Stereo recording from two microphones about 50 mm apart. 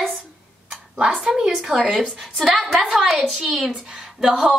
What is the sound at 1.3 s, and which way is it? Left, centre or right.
Speech, centre.